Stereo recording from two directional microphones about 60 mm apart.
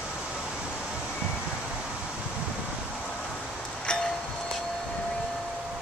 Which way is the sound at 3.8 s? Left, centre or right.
Centre.